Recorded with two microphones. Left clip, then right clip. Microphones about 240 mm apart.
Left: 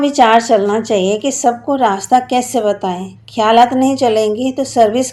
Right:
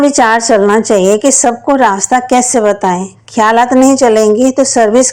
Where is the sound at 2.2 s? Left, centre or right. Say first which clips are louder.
Right 5 dB; right.